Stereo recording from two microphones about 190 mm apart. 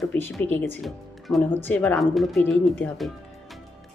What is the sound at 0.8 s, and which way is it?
A woman's voice, centre (ahead or behind).